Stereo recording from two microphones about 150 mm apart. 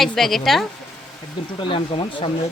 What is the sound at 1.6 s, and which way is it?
Speech, 35° left (ahead or behind).